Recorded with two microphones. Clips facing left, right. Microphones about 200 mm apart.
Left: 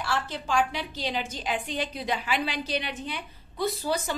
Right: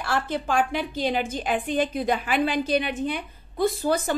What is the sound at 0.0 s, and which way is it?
A woman's voice, 55° right (ahead or behind).